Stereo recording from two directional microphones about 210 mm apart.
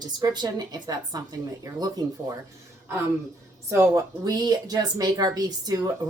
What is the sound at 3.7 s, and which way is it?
A woman's voice, 15° right (ahead or behind).